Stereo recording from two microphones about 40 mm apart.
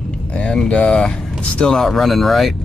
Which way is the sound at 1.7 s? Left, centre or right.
Centre.